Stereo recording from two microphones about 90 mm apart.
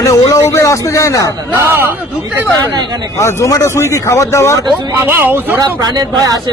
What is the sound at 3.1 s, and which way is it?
Speech, 30° left (ahead or behind).